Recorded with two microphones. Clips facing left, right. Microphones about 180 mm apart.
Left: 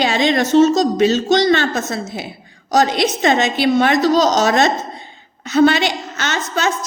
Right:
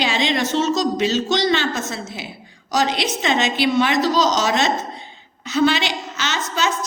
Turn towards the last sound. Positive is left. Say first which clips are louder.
# left 3 dB
turn(degrees=50)  # may be behind; listen again after turning